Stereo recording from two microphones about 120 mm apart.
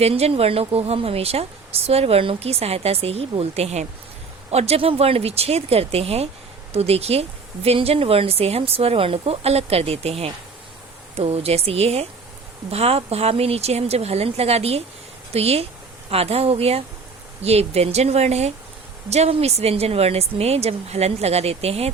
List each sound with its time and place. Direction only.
0.0 s a woman's voice: 55° right (ahead or behind)